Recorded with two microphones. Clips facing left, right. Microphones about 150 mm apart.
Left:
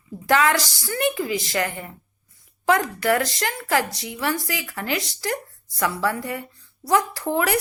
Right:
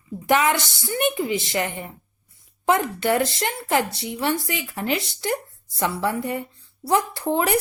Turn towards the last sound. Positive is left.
turn(degrees=-25)  # may be behind; listen again after turning